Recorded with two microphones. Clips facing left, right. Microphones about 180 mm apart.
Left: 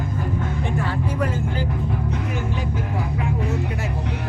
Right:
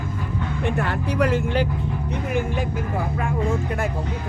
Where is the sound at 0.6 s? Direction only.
65° right (ahead or behind).